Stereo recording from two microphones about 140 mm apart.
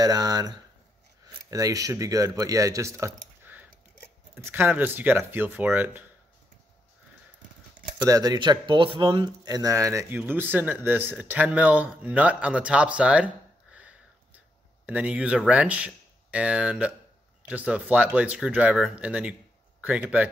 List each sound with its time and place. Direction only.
0.0 s speech: 25° right (ahead or behind)
8.1 s speech: 25° right (ahead or behind); by 20.2 s 10° right (ahead or behind)